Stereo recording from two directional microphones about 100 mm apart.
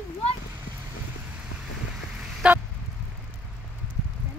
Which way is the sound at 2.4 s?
10° right (ahead or behind).